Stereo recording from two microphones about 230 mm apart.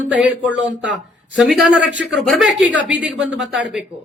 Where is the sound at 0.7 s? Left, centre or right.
Right.